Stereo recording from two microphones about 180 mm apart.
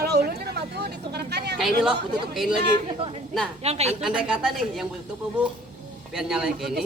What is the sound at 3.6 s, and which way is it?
Speech, 35° right (ahead or behind).